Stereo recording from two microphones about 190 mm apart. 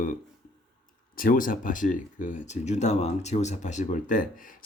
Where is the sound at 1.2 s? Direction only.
45° left (ahead or behind).